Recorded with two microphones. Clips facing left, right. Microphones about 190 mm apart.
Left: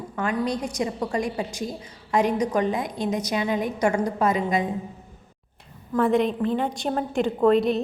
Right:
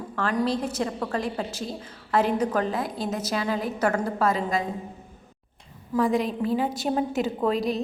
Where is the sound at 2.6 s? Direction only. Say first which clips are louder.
Left 2 dB; 5° right (ahead or behind).